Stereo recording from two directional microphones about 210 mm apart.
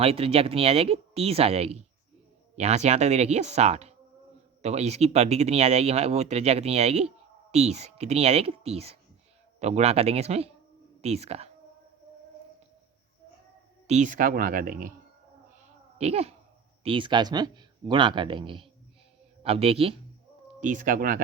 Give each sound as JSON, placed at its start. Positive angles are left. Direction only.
{"t": 0.0, "sound": "speech", "side_deg": -30}
{"t": 13.8, "sound": "speech", "side_deg": -35}
{"t": 16.0, "sound": "speech", "side_deg": -30}